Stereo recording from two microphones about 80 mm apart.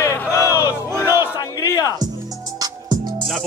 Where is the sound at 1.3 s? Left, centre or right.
Left.